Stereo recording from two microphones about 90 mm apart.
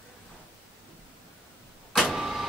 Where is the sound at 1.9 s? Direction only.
Centre (ahead or behind).